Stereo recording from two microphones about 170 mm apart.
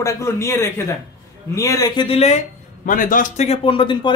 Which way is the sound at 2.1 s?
40° left (ahead or behind).